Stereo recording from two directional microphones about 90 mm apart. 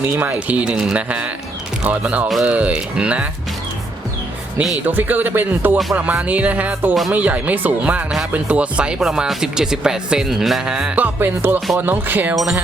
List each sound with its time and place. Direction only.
0.1 s speech: 20° right (ahead or behind)
4.9 s a man's voice: 20° right (ahead or behind)